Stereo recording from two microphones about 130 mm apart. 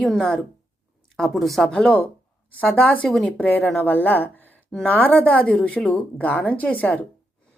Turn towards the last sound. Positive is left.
turn(degrees=10)  # may be behind; listen again after turning